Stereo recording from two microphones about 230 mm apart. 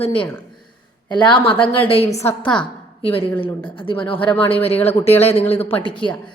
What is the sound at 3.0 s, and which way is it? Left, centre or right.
A woman's voice, left.